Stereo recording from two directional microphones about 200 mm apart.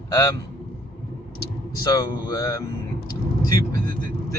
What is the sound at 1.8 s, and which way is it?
Speech, 20° left (ahead or behind).